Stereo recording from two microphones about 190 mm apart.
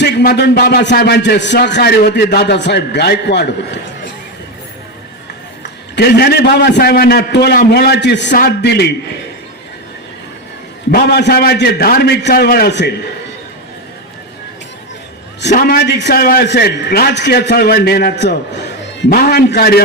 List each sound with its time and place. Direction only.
0.0 s speech: 65° left (ahead or behind)
6.0 s speech: 55° left (ahead or behind)
8.3 s speech: 50° left (ahead or behind)
10.9 s speech: 55° left (ahead or behind)
15.4 s speech: 60° left (ahead or behind)